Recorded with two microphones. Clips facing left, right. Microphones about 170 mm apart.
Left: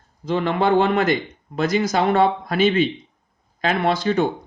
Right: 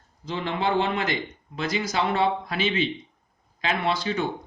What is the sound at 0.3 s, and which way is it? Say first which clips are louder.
Speech: left 7 dB; 55° left (ahead or behind).